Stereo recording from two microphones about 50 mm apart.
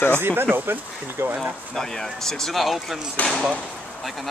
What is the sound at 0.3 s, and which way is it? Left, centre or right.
Speech, right.